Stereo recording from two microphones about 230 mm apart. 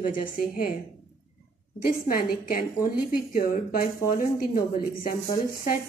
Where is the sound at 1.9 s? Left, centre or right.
Left.